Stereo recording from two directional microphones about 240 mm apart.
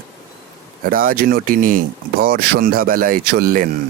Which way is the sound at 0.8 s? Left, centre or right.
Right.